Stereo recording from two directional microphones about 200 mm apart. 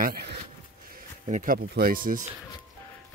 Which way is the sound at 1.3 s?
45° right (ahead or behind).